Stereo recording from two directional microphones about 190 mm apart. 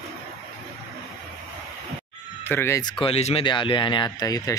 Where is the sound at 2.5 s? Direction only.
15° left (ahead or behind).